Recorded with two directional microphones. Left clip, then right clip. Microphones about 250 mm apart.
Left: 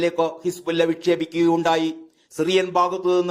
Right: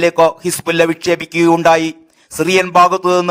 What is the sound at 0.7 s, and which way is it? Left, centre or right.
Speech, right.